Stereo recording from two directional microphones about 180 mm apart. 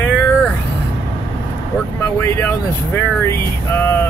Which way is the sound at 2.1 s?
15° left (ahead or behind).